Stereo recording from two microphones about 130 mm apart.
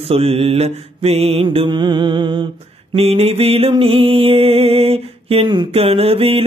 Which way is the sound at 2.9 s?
50° right (ahead or behind).